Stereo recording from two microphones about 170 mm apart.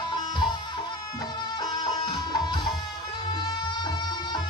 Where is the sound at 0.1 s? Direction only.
25° left (ahead or behind).